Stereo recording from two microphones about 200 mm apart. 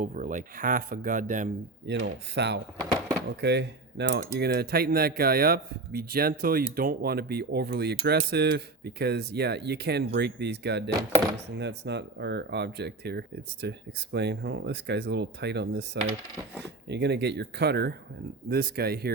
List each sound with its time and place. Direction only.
0.0 s speech: 40° right (ahead or behind)
1.9 s speech: 60° right (ahead or behind)